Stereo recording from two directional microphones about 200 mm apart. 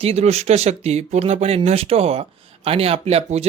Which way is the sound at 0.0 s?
30° right (ahead or behind).